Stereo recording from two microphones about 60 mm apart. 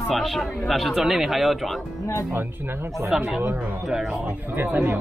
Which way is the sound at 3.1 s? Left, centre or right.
Centre.